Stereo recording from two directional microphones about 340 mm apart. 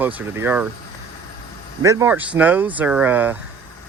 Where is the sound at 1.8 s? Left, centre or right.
Centre.